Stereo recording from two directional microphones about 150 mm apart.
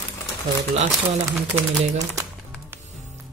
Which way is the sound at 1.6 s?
20° right (ahead or behind).